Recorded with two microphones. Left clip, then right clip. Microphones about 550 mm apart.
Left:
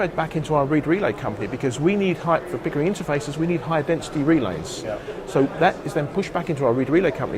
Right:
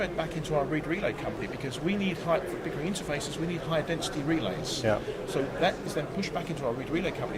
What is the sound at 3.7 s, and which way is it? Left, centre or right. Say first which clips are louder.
Speech: left 4 dB; left.